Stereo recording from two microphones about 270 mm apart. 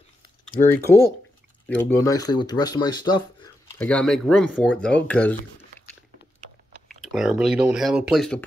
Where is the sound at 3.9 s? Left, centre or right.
Centre.